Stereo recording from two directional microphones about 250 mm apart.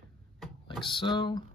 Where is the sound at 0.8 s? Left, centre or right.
Centre.